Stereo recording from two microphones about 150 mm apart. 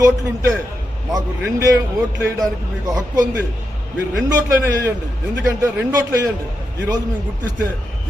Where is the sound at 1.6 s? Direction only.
20° right (ahead or behind).